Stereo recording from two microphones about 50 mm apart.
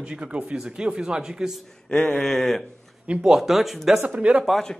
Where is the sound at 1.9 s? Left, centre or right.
Left.